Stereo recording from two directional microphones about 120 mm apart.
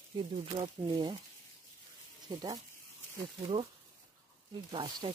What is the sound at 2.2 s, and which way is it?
Speech, 35° right (ahead or behind).